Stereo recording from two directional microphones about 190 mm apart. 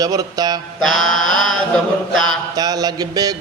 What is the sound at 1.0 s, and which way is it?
Mantra, 90° right.